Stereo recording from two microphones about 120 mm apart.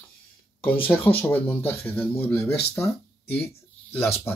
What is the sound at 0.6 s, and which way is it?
Speech, 15° left (ahead or behind).